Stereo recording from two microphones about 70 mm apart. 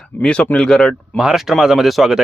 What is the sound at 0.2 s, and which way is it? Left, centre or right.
Speech, centre.